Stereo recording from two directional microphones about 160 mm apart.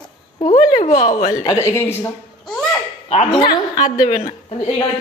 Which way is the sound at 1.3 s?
20° left (ahead or behind).